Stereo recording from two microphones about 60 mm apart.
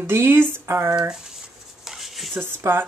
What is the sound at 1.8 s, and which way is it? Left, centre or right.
Dishes, centre.